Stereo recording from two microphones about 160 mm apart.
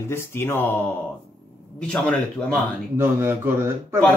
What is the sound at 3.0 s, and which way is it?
A man's voice, 15° right (ahead or behind).